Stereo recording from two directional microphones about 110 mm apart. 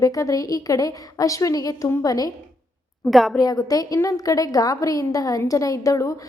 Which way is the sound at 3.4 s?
35° left (ahead or behind).